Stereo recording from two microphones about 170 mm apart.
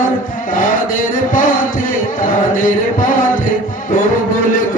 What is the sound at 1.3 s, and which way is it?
Music, 55° left (ahead or behind).